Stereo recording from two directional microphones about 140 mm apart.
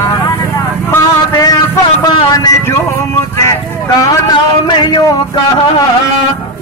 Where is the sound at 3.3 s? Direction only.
25° left (ahead or behind).